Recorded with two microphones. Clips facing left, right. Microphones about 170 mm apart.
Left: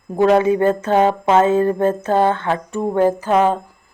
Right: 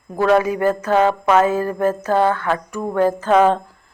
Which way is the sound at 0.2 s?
25° left (ahead or behind).